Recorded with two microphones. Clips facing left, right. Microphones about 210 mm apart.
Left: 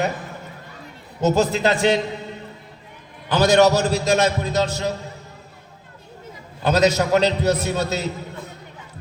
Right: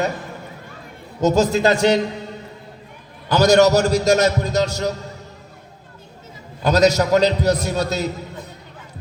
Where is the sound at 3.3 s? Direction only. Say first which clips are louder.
Right 2 dB; 45° right (ahead or behind).